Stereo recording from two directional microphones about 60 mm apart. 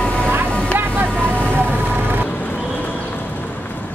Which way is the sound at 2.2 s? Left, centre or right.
Left.